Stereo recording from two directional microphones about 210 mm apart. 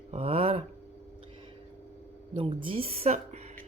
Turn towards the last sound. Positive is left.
turn(degrees=-30)  # may be behind; listen again after turning